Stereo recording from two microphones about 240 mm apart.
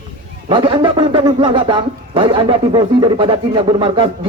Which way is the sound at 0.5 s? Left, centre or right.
Right.